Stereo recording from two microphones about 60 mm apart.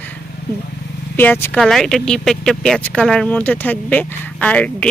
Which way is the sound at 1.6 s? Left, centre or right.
Centre.